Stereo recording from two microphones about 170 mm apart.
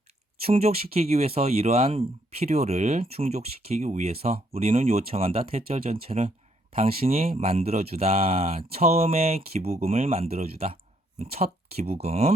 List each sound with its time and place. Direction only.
0.4 s speech: 35° right (ahead or behind)